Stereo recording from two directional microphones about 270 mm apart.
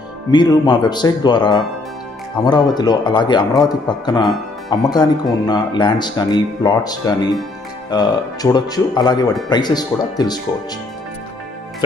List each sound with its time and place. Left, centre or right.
0.3 s speech: centre